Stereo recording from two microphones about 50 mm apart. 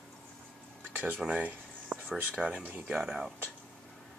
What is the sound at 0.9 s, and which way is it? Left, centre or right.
Speech, right.